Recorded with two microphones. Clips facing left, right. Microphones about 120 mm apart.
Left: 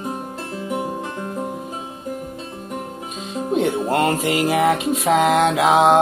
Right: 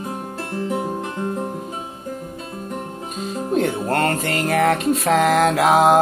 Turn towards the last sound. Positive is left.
turn(degrees=0)  # may be behind; listen again after turning